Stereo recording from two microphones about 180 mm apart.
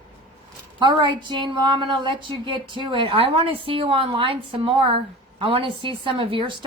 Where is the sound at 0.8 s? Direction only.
25° right (ahead or behind).